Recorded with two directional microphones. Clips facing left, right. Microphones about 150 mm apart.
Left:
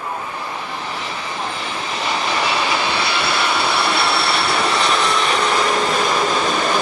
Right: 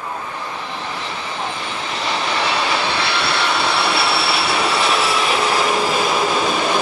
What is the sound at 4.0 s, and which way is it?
Vehicle, 5° right (ahead or behind).